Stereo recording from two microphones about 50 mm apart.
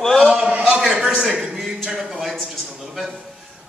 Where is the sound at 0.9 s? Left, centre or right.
Centre.